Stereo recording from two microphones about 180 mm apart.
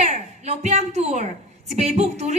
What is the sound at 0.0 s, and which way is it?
A woman's voice, 40° right (ahead or behind).